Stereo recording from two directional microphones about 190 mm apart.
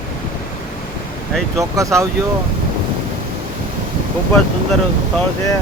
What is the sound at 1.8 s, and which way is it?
Speech, 15° right (ahead or behind).